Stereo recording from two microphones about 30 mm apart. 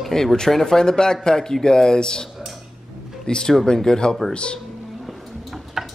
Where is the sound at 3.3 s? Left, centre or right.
Centre.